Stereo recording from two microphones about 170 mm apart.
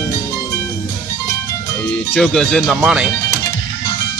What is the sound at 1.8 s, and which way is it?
Speech, 5° left (ahead or behind).